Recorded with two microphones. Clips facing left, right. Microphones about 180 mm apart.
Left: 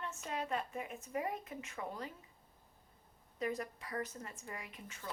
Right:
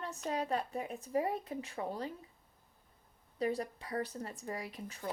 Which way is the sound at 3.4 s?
35° right (ahead or behind).